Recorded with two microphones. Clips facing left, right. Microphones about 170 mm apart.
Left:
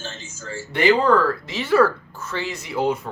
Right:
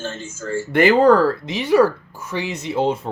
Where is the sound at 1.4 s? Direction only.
15° right (ahead or behind).